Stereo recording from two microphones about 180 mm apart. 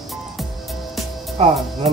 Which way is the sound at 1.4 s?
35° right (ahead or behind).